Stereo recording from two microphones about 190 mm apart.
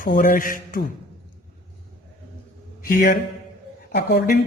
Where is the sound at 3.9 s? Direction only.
60° left (ahead or behind).